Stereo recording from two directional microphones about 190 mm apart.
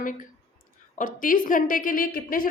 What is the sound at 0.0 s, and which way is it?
A woman's voice, 45° left (ahead or behind).